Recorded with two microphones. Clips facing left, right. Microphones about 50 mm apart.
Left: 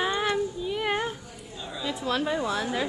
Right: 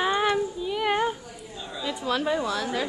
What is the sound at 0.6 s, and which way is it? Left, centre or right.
A woman's voice, centre.